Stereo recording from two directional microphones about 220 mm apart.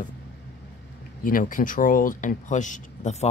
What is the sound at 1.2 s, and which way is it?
Speech, 40° left (ahead or behind).